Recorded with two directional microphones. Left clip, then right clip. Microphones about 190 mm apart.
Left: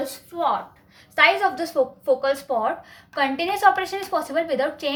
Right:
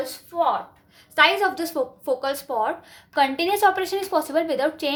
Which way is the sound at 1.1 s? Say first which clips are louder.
Even; 30° right (ahead or behind).